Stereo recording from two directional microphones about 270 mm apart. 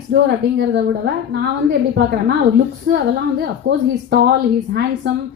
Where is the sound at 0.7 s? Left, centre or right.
Right.